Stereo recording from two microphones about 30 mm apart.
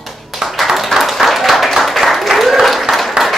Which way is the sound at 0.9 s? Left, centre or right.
Centre.